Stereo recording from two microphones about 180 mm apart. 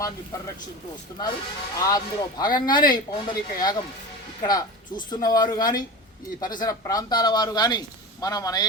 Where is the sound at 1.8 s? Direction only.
20° left (ahead or behind).